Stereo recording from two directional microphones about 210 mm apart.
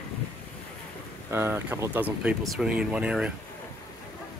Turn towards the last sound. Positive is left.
turn(degrees=-5)  # may be behind; listen again after turning